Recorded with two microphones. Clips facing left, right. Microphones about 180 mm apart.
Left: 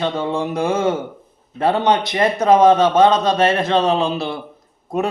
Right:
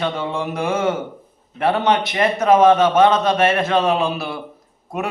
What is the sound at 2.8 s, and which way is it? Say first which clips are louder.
Mantra: left 1 dB; 15° left (ahead or behind).